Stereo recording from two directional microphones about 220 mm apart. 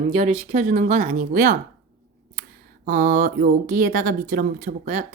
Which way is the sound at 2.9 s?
40° right (ahead or behind).